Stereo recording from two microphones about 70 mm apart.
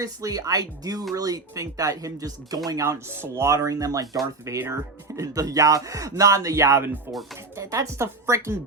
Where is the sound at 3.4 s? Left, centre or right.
Right.